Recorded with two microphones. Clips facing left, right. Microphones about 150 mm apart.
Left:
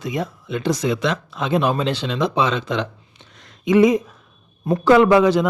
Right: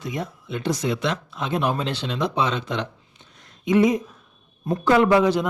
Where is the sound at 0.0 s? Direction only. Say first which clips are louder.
Left 5 dB; 90° left.